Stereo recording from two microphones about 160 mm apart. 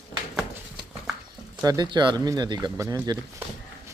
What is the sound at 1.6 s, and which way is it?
Speech, 25° right (ahead or behind).